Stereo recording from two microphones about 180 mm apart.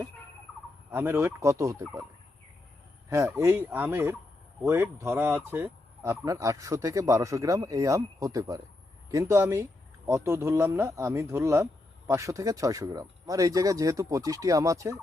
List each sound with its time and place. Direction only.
0.9 s speech: 10° right (ahead or behind)
3.1 s speech: 15° right (ahead or behind)